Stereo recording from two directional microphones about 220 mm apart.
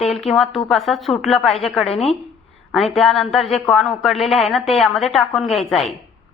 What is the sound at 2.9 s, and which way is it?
A woman's voice, centre (ahead or behind).